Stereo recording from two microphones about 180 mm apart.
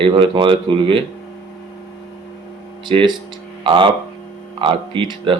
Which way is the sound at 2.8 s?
25° right (ahead or behind).